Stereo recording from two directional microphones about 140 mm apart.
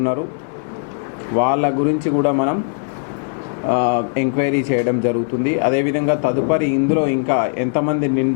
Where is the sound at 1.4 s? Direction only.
20° left (ahead or behind).